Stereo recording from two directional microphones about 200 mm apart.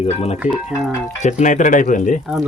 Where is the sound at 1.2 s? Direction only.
35° left (ahead or behind).